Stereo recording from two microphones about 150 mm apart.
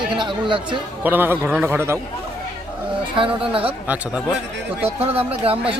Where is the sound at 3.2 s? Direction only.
35° right (ahead or behind).